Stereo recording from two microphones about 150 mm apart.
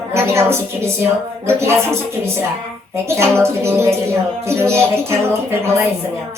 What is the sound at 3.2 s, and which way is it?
A woman's voice, 15° right (ahead or behind).